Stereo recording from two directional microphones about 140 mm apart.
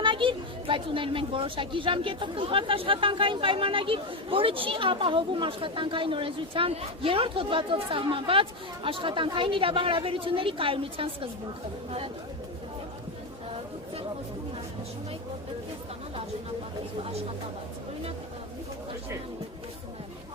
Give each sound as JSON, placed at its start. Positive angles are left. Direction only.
{"t": 0.0, "sound": "speech", "side_deg": -35}